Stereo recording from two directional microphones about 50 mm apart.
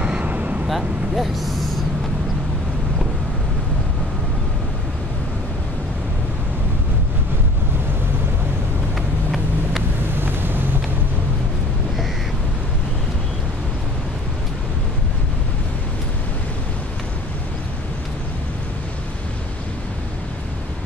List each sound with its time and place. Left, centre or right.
0.0 s vehicle: right
0.7 s speech: centre
10.1 s vehicle: right